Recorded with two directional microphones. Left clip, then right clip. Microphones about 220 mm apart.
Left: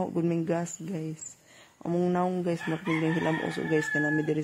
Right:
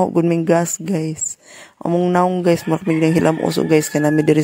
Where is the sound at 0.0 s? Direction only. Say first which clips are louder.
Right 13 dB; 40° right (ahead or behind).